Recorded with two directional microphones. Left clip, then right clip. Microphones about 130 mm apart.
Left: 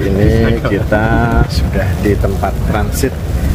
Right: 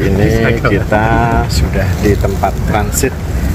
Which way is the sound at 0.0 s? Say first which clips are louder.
Right 1 dB; 20° left (ahead or behind).